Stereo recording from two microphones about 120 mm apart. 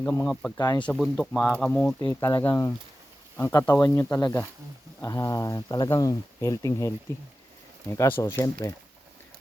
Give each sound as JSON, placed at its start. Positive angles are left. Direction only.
{"t": 0.0, "sound": "speech", "side_deg": 10}
{"t": 0.5, "sound": "speech", "side_deg": 30}
{"t": 0.8, "sound": "speech", "side_deg": 10}